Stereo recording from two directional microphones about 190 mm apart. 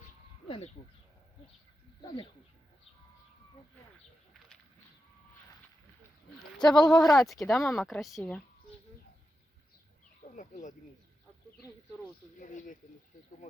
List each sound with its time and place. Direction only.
0.4 s a sound: 30° left (ahead or behind)
2.0 s speech: 25° left (ahead or behind)
6.6 s speech: 20° left (ahead or behind)
7.0 s speech: centre (ahead or behind)
10.3 s speech: 40° left (ahead or behind)
12.4 s speech: 45° left (ahead or behind)